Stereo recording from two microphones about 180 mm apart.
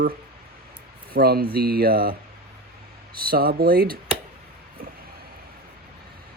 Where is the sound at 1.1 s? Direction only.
60° right (ahead or behind).